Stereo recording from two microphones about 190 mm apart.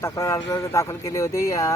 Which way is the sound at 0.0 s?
15° left (ahead or behind).